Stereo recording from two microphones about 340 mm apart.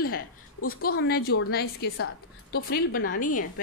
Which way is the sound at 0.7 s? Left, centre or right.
Left.